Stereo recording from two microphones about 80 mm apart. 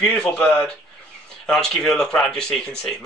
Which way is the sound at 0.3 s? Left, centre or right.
Centre.